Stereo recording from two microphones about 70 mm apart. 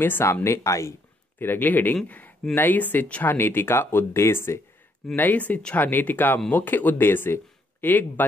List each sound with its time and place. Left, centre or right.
0.0 s speech: left
1.4 s speech: left
5.1 s speech: left